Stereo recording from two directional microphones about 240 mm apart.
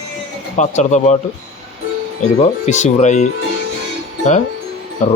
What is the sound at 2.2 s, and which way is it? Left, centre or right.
Speech, left.